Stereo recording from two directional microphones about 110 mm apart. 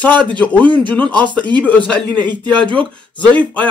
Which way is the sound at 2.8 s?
10° left (ahead or behind).